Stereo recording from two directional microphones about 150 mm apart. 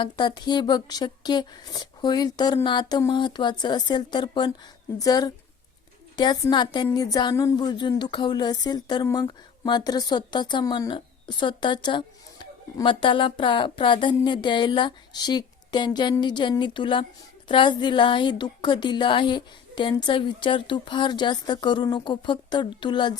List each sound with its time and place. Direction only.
0.0 s speech: 30° left (ahead or behind)
9.6 s a woman's voice: 30° left (ahead or behind)